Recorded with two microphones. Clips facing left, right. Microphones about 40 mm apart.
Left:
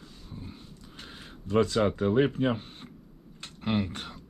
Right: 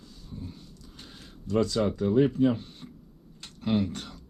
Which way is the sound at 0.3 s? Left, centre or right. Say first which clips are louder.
Right 2 dB; left.